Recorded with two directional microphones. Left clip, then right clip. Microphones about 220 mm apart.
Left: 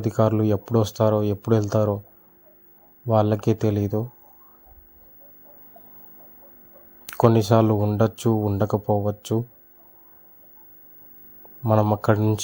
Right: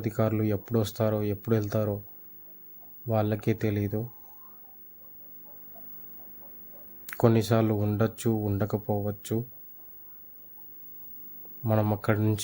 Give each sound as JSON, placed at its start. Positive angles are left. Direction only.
{"t": 0.0, "sound": "speech", "side_deg": 15}
{"t": 3.1, "sound": "speech", "side_deg": 15}
{"t": 7.0, "sound": "speech", "side_deg": 10}
{"t": 11.6, "sound": "speech", "side_deg": 5}